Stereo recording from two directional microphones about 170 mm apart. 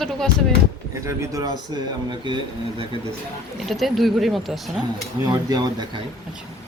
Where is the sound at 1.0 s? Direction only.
20° right (ahead or behind).